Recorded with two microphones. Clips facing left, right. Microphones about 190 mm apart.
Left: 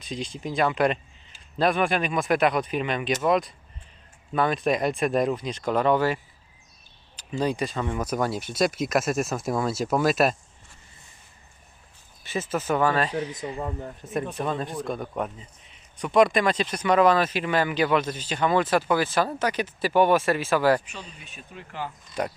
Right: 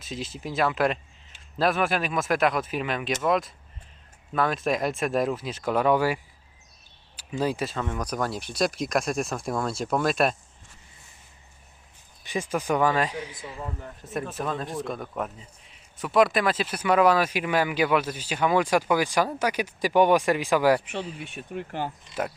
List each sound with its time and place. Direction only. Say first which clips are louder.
0.0 s speech: left 2 dB; 5° right (ahead or behind)
7.2 s speech: left 1 dB; 5° right (ahead or behind)
12.2 s speech: even; 15° right (ahead or behind)
14.0 s speech: left 2 dB; centre (ahead or behind)
20.9 s speech: right 9 dB; 65° right (ahead or behind)